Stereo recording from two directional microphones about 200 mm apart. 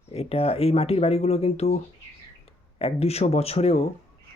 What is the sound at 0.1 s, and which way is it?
Speech, 30° left (ahead or behind).